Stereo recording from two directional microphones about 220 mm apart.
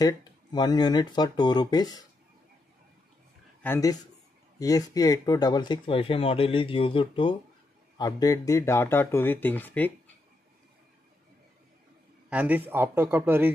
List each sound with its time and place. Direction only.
0.0 s speech: 20° left (ahead or behind)
3.6 s speech: 10° left (ahead or behind)
12.3 s a man's voice: 5° right (ahead or behind)